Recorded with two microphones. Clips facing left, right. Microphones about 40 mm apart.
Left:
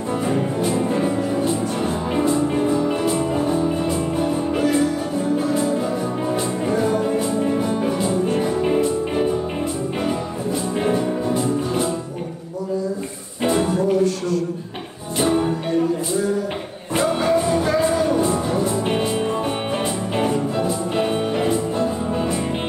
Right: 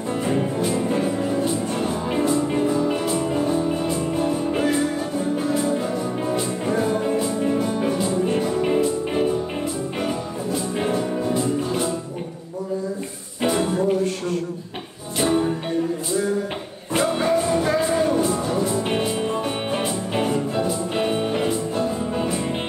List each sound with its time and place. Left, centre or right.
1.0 s music: centre
2.6 s music: left
3.3 s music: centre
3.9 s music: centre
5.5 s music: left
7.5 s music: centre
10.9 s music: centre
15.2 s music: left
17.2 s music: left
18.9 s music: centre
20.9 s music: centre